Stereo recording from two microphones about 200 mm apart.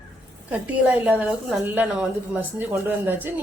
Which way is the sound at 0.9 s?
5° right (ahead or behind).